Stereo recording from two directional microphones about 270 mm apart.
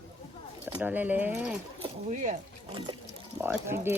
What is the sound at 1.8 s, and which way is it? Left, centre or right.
Speech, right.